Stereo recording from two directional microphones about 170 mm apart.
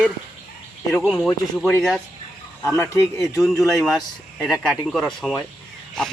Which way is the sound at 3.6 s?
Centre (ahead or behind).